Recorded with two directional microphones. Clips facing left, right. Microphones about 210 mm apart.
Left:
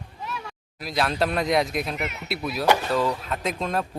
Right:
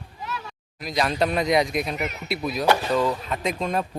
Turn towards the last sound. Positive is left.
turn(degrees=0)  # may be behind; listen again after turning